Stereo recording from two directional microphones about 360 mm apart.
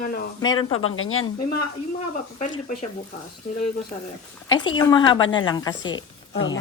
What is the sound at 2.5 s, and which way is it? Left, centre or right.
Speech, left.